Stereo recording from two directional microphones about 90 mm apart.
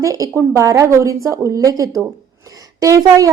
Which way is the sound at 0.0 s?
35° right (ahead or behind).